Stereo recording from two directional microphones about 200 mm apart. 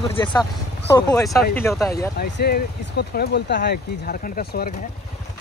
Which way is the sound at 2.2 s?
50° left (ahead or behind).